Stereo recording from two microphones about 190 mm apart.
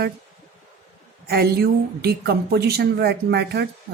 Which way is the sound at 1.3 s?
55° right (ahead or behind).